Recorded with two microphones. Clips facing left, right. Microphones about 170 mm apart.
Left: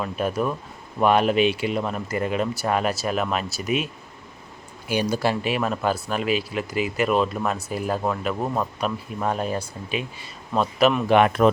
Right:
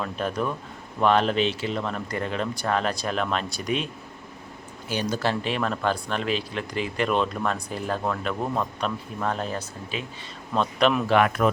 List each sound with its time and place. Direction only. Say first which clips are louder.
0.0 s speech: left 3 dB; 10° left (ahead or behind)
4.9 s a man's voice: left 3 dB; 10° left (ahead or behind)
11.0 s speech: left 3 dB; 20° left (ahead or behind)